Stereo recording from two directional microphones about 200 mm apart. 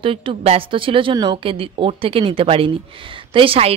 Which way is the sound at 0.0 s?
25° right (ahead or behind).